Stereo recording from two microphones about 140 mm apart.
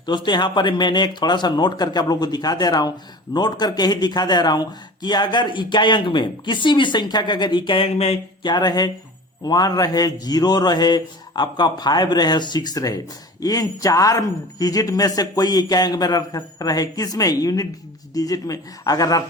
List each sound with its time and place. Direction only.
0.0 s a man's voice: 35° left (ahead or behind)
8.4 s speech: 30° left (ahead or behind)